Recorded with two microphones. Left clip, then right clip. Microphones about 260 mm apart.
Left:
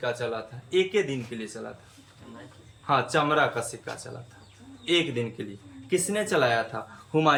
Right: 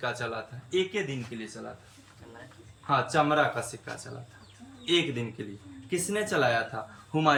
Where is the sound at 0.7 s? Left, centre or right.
Centre.